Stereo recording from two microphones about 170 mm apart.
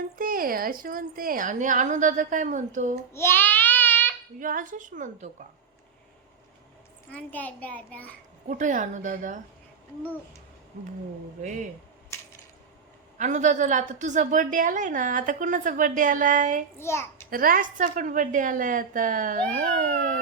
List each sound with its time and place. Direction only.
0.0 s a woman's voice: 55° right (ahead or behind)
3.1 s child singing: 15° left (ahead or behind)
4.4 s a woman's voice: 50° right (ahead or behind)
7.1 s a child's voice: 10° left (ahead or behind)
8.4 s a woman's voice: 45° right (ahead or behind)
13.1 s a woman's voice: 45° right (ahead or behind)
16.7 s a child's voice: 15° left (ahead or behind)
17.2 s a woman's voice: 55° right (ahead or behind)